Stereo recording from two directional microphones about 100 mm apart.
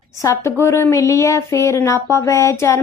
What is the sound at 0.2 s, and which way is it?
A woman's voice, 35° left (ahead or behind).